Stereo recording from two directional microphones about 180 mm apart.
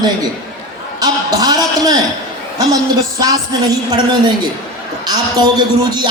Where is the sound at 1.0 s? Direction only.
20° right (ahead or behind).